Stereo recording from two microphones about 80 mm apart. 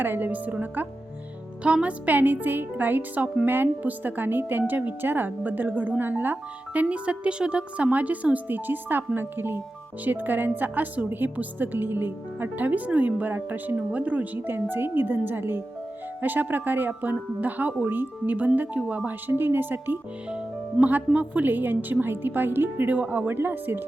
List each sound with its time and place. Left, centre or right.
0.0 s a woman's voice: right